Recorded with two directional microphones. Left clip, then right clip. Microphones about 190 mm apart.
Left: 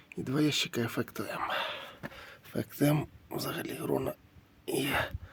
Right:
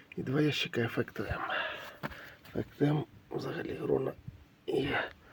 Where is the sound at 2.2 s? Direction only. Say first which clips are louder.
Left 1 dB; 25° left (ahead or behind).